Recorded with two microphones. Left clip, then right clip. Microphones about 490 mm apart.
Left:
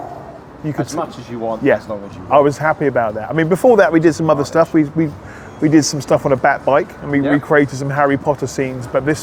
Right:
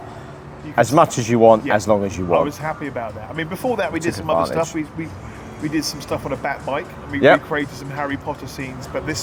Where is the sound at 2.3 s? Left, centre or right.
Left.